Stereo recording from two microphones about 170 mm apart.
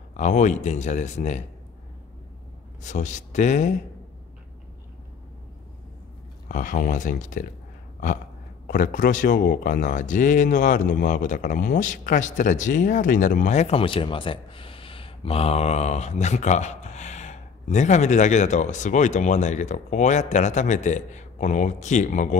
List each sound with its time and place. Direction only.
0.1 s speech: 45° left (ahead or behind)
2.8 s speech: 45° left (ahead or behind)
6.5 s speech: 50° left (ahead or behind)
8.6 s speech: 50° left (ahead or behind)